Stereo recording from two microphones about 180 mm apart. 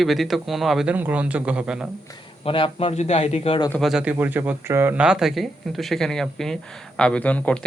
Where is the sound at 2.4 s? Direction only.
30° left (ahead or behind).